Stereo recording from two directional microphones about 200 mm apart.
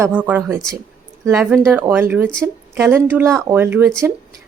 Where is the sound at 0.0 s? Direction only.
5° right (ahead or behind).